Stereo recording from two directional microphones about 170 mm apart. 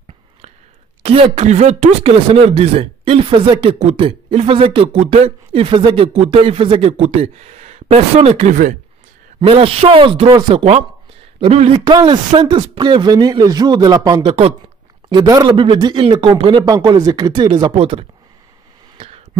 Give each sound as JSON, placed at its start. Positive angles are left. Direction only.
{"t": 1.0, "sound": "speech", "side_deg": -35}
{"t": 9.5, "sound": "speech", "side_deg": -35}
{"t": 11.8, "sound": "a man's voice", "side_deg": -25}
{"t": 18.9, "sound": "a sound", "side_deg": -35}